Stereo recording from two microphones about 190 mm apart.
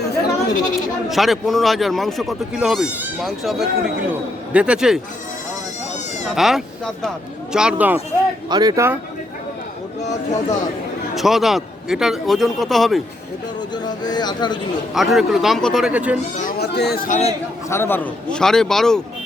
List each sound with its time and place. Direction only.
0.0 s bleat: 50° left (ahead or behind)
1.1 s speech: centre (ahead or behind)
6.3 s speech: centre (ahead or behind)
8.4 s speech: 20° right (ahead or behind)
11.1 s speech: centre (ahead or behind)
13.8 s speech: 20° left (ahead or behind)
14.9 s speech: centre (ahead or behind)
16.4 s speech: 55° left (ahead or behind)
17.1 s a man's voice: 35° left (ahead or behind)
17.7 s speech: 10° left (ahead or behind)